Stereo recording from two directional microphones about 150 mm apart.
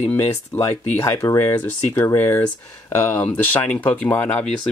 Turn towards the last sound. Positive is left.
turn(degrees=15)  # may be behind; listen again after turning